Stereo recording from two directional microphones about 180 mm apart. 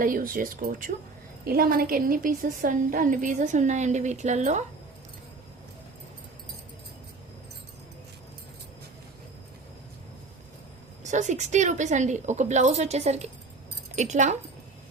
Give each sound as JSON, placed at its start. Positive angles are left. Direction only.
{"t": 0.0, "sound": "a woman's voice", "side_deg": -50}
{"t": 11.0, "sound": "a woman's voice", "side_deg": -40}